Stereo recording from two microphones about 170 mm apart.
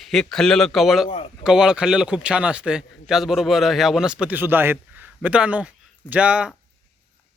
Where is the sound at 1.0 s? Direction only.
35° left (ahead or behind).